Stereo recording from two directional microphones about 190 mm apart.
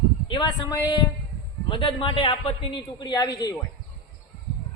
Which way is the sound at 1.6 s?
25° left (ahead or behind).